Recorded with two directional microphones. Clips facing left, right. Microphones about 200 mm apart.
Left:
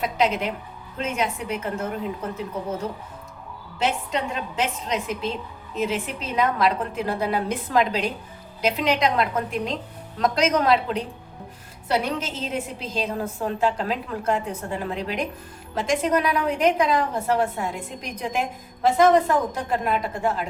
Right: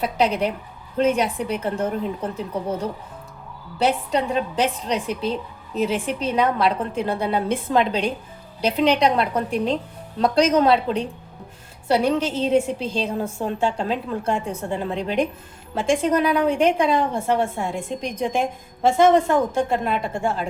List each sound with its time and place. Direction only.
0.0 s a woman's voice: 35° right (ahead or behind)
3.8 s a woman's voice: 35° right (ahead or behind)